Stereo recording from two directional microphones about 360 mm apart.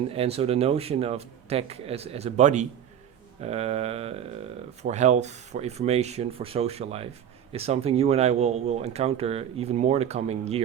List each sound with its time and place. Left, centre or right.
0.1 s speech: centre